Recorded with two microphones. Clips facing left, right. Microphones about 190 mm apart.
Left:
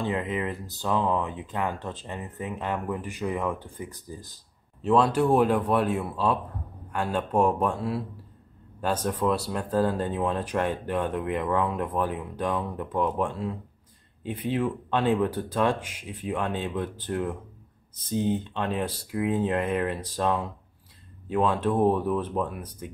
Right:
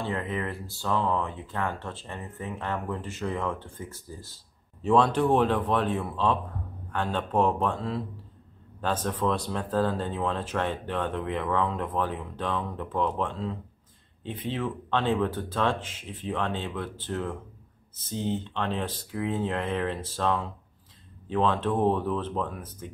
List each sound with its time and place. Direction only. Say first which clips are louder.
0.0 s speech: left 3 dB; 15° left (ahead or behind)
4.8 s speech: left 1 dB; 5° left (ahead or behind)